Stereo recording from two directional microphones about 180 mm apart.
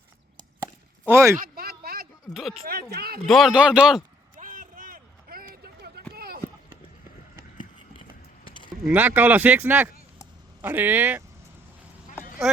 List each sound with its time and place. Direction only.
1.0 s speech: 15° right (ahead or behind)
1.4 s a sound: 55° right (ahead or behind)
2.3 s speech: centre (ahead or behind)
2.6 s speech: 60° right (ahead or behind)
3.2 s speech: centre (ahead or behind)
4.4 s a sound: 50° right (ahead or behind)
8.8 s speech: 10° right (ahead or behind)